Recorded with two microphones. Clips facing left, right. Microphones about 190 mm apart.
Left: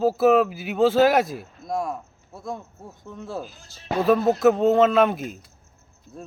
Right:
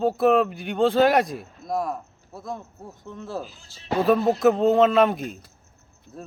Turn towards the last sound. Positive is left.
turn(degrees=0)  # may be behind; listen again after turning